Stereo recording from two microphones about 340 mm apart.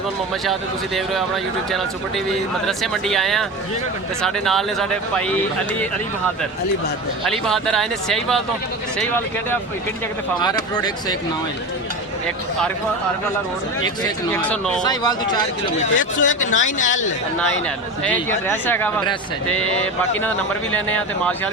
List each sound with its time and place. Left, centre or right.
1.7 s speech: centre
7.3 s speech: centre
14.5 s speech: centre
15.8 s speech: left
18.0 s speech: centre
20.7 s speech: centre